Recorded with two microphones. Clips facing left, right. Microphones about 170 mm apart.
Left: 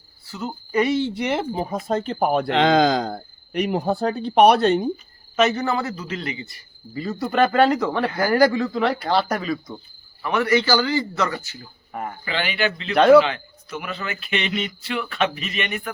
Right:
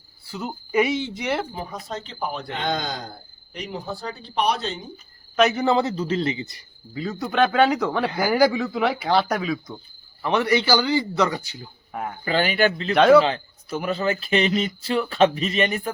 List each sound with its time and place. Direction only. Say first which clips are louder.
0.3 s a man's voice: even; 15° right (ahead or behind)
1.5 s speech: left 8 dB; 45° left (ahead or behind); by 4.9 s 60° left (ahead or behind)
5.4 s speech: even; centre (ahead or behind)
5.6 s speech: right 4 dB; 20° right (ahead or behind)
6.9 s speech: left 2 dB; centre (ahead or behind)
10.2 s a man's voice: even; 20° right (ahead or behind)
11.9 s speech: even; centre (ahead or behind)
12.2 s speech: right 5 dB; 40° right (ahead or behind)
12.9 s speech: left 2 dB; centre (ahead or behind)
13.2 s speech: right 3 dB; 30° right (ahead or behind)